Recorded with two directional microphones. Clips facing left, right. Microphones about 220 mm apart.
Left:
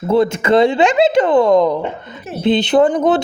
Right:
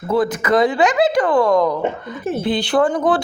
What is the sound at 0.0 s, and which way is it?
Speech, 25° left (ahead or behind).